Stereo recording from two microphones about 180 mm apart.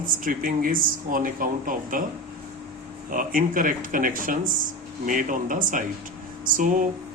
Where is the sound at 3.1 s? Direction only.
50° right (ahead or behind).